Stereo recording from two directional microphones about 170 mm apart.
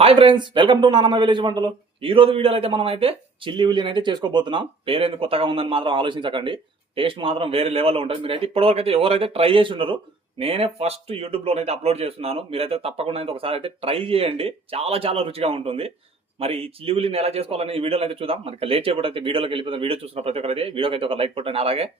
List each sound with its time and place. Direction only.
0.0 s speech: 30° right (ahead or behind)